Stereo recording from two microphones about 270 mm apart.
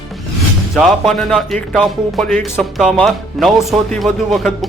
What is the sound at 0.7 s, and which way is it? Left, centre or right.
Speech, centre.